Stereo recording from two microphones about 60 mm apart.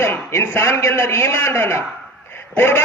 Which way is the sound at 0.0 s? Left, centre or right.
Left.